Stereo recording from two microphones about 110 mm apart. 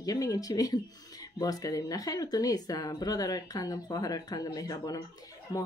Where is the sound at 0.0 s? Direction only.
35° left (ahead or behind).